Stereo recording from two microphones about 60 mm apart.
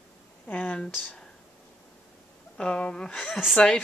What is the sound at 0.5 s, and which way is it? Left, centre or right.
Speech, left.